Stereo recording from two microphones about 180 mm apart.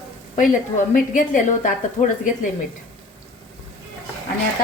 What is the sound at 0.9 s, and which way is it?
A woman's voice, 45° left (ahead or behind).